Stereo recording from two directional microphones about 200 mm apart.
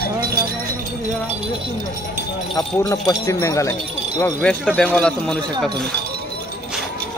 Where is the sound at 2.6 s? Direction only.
15° left (ahead or behind).